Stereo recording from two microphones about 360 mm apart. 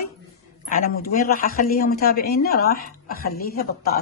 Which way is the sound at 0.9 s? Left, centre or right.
Left.